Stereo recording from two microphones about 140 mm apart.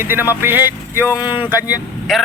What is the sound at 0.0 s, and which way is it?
Speech, 15° right (ahead or behind).